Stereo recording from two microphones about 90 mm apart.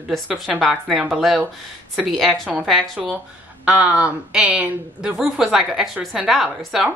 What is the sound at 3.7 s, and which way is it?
A woman's voice, 15° right (ahead or behind).